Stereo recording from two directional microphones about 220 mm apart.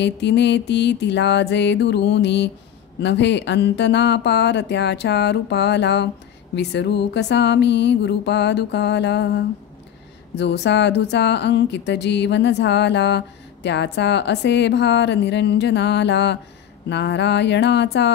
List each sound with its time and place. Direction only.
0.0 s speech: 50° left (ahead or behind)